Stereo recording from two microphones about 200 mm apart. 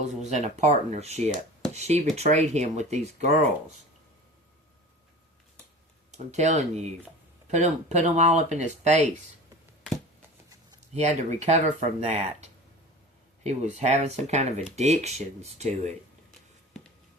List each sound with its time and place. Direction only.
0.3 s speech: 35° right (ahead or behind)
6.1 s speech: 35° right (ahead or behind)
10.9 s speech: 35° right (ahead or behind)